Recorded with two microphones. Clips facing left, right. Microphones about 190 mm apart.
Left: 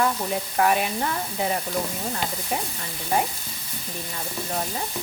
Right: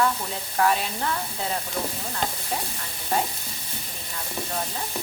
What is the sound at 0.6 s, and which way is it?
Speech, 15° left (ahead or behind).